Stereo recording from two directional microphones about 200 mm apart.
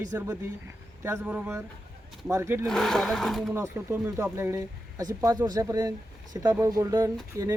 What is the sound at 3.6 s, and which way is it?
Speech, 10° right (ahead or behind).